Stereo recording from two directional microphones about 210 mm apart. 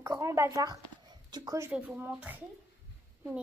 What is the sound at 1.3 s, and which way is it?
A child's voice, 15° right (ahead or behind).